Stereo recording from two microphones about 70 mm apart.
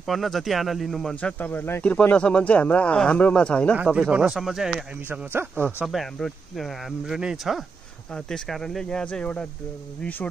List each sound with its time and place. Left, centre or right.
0.0 s speech: centre
1.4 s speech: left
3.7 s speech: centre
5.3 s a man's voice: right
5.9 s speech: centre
7.2 s speech: centre
8.1 s speech: centre